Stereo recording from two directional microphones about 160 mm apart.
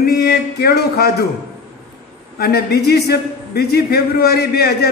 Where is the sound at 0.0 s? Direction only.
80° left.